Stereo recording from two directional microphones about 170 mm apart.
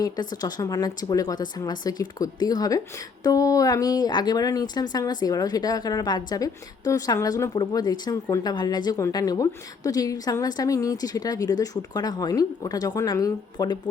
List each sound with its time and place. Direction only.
0.0 s a woman's voice: 25° left (ahead or behind)